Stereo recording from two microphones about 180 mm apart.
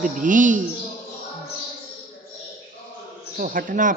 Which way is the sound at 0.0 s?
45° right (ahead or behind).